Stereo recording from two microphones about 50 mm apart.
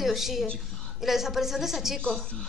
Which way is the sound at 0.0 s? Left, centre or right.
Centre.